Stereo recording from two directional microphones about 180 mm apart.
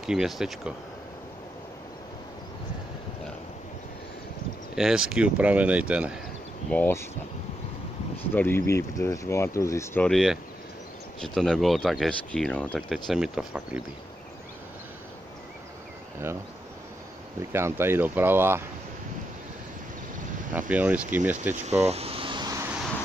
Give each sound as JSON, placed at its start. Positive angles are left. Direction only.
{"t": 0.0, "sound": "speech", "side_deg": -5}
{"t": 4.7, "sound": "speech", "side_deg": -5}
{"t": 6.7, "sound": "speech", "side_deg": 10}
{"t": 8.4, "sound": "speech", "side_deg": 10}
{"t": 10.0, "sound": "speech", "side_deg": 0}
{"t": 17.5, "sound": "speech", "side_deg": -15}
{"t": 20.5, "sound": "speech", "side_deg": -5}
{"t": 21.6, "sound": "a sound", "side_deg": -35}